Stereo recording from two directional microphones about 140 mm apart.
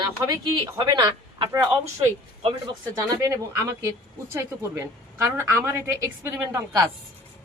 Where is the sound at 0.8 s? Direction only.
30° right (ahead or behind).